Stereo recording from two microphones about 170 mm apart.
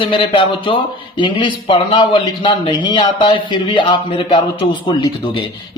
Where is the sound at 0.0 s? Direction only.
30° left (ahead or behind).